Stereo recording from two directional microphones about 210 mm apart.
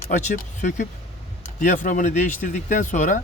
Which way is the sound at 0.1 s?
35° left (ahead or behind).